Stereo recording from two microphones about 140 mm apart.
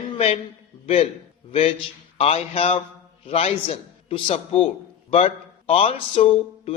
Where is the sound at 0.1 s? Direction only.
45° left (ahead or behind).